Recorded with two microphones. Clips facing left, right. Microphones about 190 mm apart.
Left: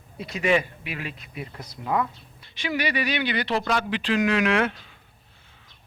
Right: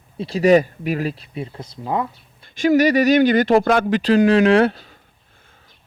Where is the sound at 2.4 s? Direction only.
45° right (ahead or behind).